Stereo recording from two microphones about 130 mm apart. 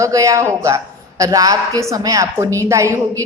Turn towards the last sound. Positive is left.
turn(degrees=-25)  # may be behind; listen again after turning